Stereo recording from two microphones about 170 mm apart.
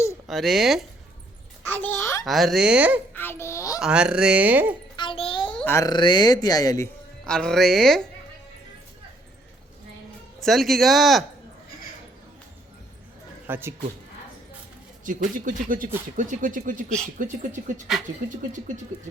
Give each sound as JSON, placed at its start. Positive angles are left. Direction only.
{"t": 0.3, "sound": "speech", "side_deg": 0}
{"t": 1.7, "sound": "a child's voice", "side_deg": 10}
{"t": 2.2, "sound": "speech", "side_deg": 0}
{"t": 3.2, "sound": "a child's voice", "side_deg": 15}
{"t": 3.8, "sound": "speech", "side_deg": -5}
{"t": 4.9, "sound": "a sound", "side_deg": 30}
{"t": 5.5, "sound": "a child's voice", "side_deg": 10}
{"t": 7.3, "sound": "speech", "side_deg": 5}
{"t": 10.4, "sound": "speech", "side_deg": 0}
{"t": 13.5, "sound": "speech", "side_deg": -15}
{"t": 15.0, "sound": "speech", "side_deg": -50}